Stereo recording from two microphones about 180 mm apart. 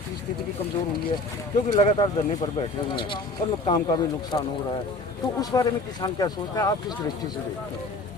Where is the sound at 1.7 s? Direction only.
35° left (ahead or behind).